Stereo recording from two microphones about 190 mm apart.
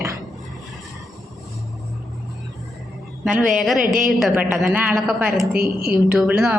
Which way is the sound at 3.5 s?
Centre (ahead or behind).